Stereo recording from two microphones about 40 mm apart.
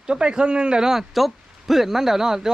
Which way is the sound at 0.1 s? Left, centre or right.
Right.